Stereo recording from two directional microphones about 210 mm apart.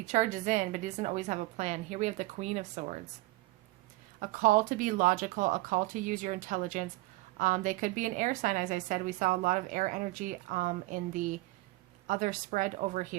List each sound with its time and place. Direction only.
0.0 s a woman's voice: 35° right (ahead or behind)
4.2 s a woman's voice: 40° right (ahead or behind)